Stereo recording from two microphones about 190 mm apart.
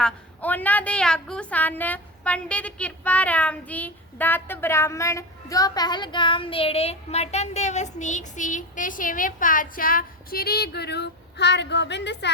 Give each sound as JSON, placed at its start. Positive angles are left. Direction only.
{"t": 0.0, "sound": "a woman's voice", "side_deg": 10}